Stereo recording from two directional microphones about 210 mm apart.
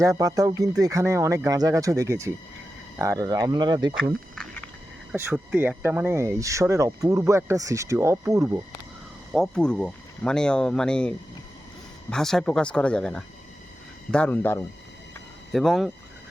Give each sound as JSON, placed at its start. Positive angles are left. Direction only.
{"t": 0.0, "sound": "speech", "side_deg": -15}
{"t": 4.4, "sound": "a sound", "side_deg": 5}
{"t": 5.1, "sound": "speech", "side_deg": -10}
{"t": 9.3, "sound": "speech", "side_deg": 0}
{"t": 12.1, "sound": "speech", "side_deg": 0}